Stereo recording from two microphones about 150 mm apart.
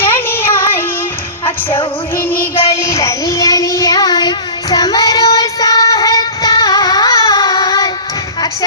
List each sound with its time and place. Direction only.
0.0 s music: 15° left (ahead or behind)
1.5 s music: 35° left (ahead or behind)
2.1 s music: 15° left (ahead or behind)
2.8 s child singing: 20° left (ahead or behind)